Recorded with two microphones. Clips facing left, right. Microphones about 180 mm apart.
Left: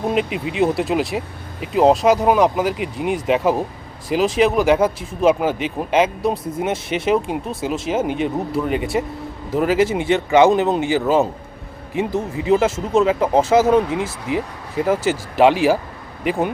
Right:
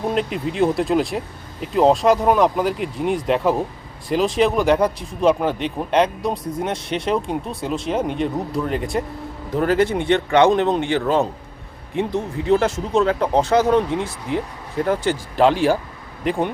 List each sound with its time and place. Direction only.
0.1 s speech: 5° left (ahead or behind)